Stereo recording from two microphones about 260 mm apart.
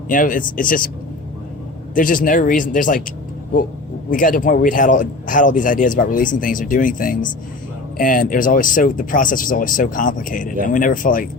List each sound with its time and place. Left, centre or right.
0.1 s speech: left
2.0 s speech: left
4.1 s speech: left